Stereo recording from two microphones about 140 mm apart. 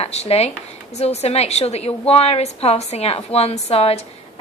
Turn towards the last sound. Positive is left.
turn(degrees=45)  # may be behind; listen again after turning